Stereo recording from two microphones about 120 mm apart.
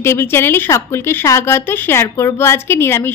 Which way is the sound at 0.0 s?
20° left (ahead or behind).